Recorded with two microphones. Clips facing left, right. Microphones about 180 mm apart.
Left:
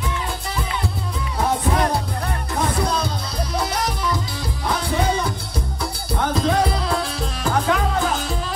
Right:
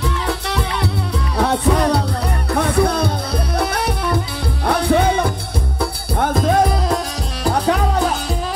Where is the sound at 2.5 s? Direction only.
60° right (ahead or behind).